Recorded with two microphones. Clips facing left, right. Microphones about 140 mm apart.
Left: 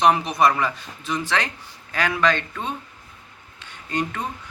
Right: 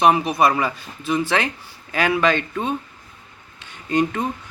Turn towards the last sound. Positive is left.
turn(degrees=-15)  # may be behind; listen again after turning